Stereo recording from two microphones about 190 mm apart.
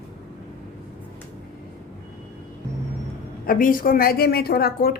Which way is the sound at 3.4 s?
45° left (ahead or behind).